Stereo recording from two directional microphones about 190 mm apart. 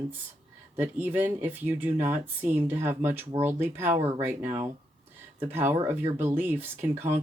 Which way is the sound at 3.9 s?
35° right (ahead or behind).